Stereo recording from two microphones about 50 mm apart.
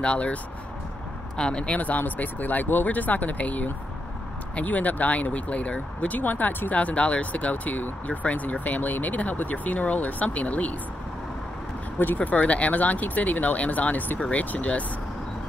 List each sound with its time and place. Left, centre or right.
0.0 s speech: left
1.8 s speech: left
12.2 s speech: left